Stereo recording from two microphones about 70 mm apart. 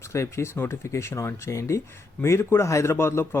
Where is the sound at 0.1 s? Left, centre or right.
Left.